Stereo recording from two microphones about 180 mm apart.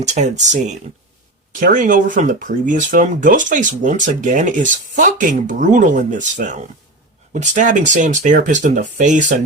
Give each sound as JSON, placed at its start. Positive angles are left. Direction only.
{"t": 0.0, "sound": "speech", "side_deg": -40}